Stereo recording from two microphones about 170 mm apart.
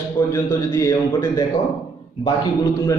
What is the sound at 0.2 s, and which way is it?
A man's voice, 15° left (ahead or behind).